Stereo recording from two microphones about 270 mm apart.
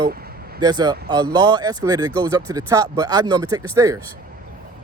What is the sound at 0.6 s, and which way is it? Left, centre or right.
Speech, centre.